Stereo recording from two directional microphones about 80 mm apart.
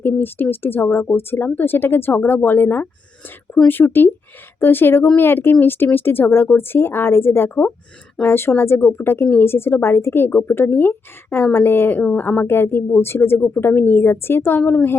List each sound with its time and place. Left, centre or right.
0.0 s speech: left